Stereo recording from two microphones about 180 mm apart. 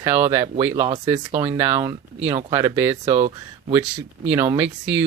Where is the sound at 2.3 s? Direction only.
30° right (ahead or behind).